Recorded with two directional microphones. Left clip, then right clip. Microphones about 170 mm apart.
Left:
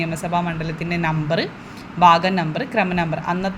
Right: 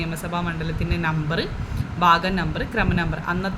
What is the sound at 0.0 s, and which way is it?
Speech, 15° left (ahead or behind).